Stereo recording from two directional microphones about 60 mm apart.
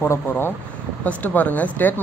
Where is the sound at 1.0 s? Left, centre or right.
Left.